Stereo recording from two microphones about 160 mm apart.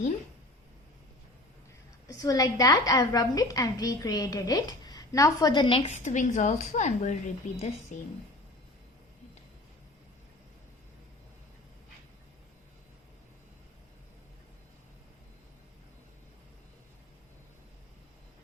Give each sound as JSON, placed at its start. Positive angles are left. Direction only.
{"t": 2.0, "sound": "a woman's voice", "side_deg": 20}
{"t": 5.9, "sound": "a woman's voice", "side_deg": 50}